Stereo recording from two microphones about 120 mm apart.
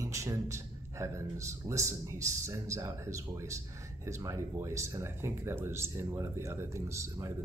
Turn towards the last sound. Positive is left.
turn(degrees=-25)  # may be behind; listen again after turning